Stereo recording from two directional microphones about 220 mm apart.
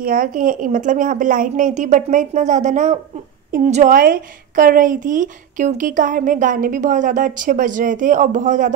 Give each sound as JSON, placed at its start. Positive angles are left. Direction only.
{"t": 0.0, "sound": "a woman's voice", "side_deg": -40}